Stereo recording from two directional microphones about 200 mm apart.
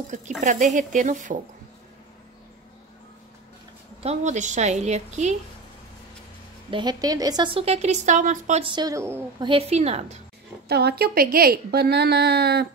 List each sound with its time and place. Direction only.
0.4 s a woman's voice: 35° right (ahead or behind)
4.0 s a woman's voice: 35° right (ahead or behind)
6.7 s a woman's voice: 20° right (ahead or behind)
9.5 s a woman's voice: 30° right (ahead or behind)
10.7 s a woman's voice: 55° right (ahead or behind)